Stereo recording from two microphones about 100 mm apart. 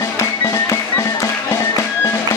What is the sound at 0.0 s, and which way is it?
Music, 30° left (ahead or behind).